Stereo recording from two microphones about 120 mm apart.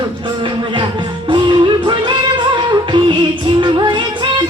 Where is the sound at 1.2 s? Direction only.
40° right (ahead or behind).